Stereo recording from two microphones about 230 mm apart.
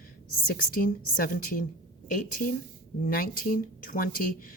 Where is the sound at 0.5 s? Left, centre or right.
Left.